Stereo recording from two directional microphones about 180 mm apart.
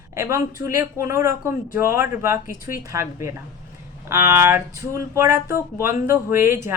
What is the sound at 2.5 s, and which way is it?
Speech, 50° left (ahead or behind).